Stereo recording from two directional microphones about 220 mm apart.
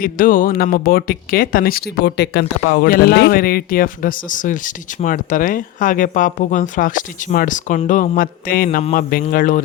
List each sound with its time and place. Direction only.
0.0 s speech: 40° left (ahead or behind)